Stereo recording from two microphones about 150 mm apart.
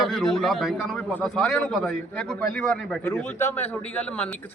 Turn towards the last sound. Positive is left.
turn(degrees=10)  # may be behind; listen again after turning